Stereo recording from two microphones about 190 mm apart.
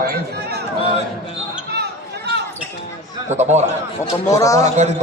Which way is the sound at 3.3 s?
35° right (ahead or behind).